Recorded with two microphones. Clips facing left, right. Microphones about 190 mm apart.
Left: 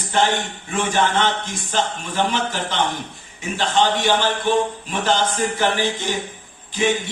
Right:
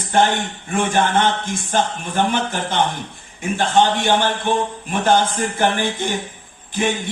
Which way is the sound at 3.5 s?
50° right (ahead or behind).